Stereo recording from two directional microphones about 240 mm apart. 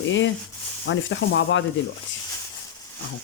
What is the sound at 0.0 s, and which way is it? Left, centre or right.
Speech, left.